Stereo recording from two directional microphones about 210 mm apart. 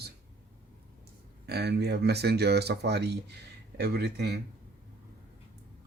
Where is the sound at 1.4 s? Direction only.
50° right (ahead or behind).